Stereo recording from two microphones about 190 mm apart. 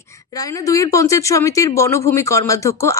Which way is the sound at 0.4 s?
15° left (ahead or behind).